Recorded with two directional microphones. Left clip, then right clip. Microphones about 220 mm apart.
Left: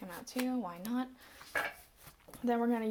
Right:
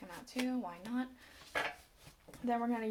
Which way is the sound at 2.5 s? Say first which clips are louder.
Left 3 dB; 30° left (ahead or behind).